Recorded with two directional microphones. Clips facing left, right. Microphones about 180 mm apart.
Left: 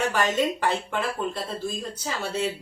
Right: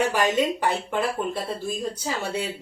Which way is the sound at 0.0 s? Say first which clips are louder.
Right 2 dB; 15° right (ahead or behind).